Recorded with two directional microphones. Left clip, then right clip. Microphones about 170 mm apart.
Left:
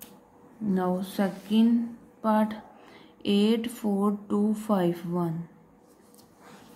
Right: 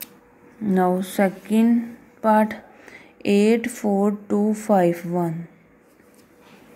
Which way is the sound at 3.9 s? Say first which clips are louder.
Right 5 dB; 25° right (ahead or behind).